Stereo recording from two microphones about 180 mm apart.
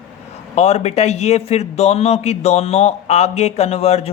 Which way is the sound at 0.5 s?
35° left (ahead or behind).